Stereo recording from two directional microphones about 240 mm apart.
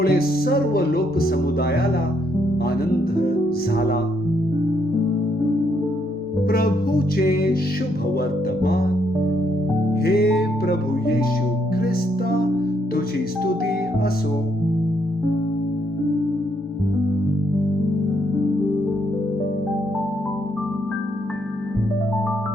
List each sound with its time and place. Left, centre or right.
0.0 s speech: left
3.8 s speech: left
6.5 s speech: left
8.6 s speech: left
10.0 s speech: left
11.8 s music: left